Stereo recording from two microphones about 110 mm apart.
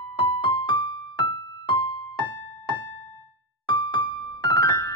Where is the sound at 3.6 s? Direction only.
45° left (ahead or behind).